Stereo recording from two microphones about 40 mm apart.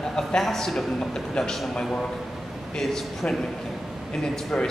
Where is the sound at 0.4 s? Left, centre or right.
Centre.